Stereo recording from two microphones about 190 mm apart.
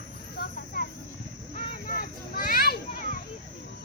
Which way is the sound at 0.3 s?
50° left (ahead or behind).